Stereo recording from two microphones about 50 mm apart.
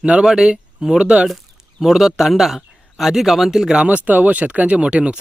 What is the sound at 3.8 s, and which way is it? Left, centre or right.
Speech, right.